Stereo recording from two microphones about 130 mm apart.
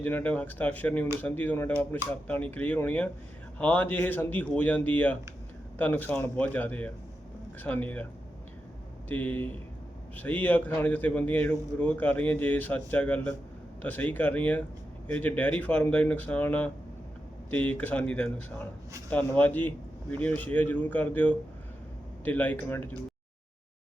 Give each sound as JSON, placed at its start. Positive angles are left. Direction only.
{"t": 0.0, "sound": "a man's voice", "side_deg": 15}
{"t": 9.0, "sound": "a man's voice", "side_deg": 15}